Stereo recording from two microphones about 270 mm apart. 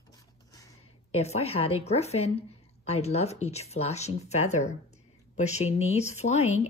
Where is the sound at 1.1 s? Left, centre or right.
Left.